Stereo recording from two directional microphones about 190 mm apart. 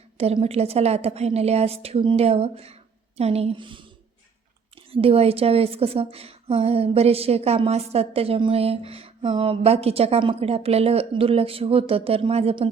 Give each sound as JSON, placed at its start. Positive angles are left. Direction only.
{"t": 0.2, "sound": "a woman's voice", "side_deg": -30}
{"t": 4.9, "sound": "a woman's voice", "side_deg": -30}